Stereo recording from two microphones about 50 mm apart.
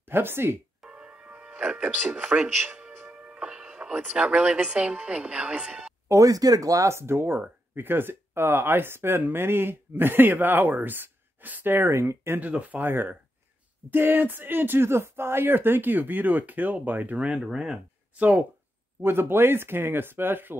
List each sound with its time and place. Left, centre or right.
0.0 s speech: right
0.8 s music: right
1.6 s a woman's voice: right
3.2 s music: centre
4.1 s a woman's voice: right
6.1 s speech: right
6.7 s speech: right
11.9 s speech: right
12.4 s speech: right
12.8 s speech: right
17.3 s speech: centre
19.0 s speech: right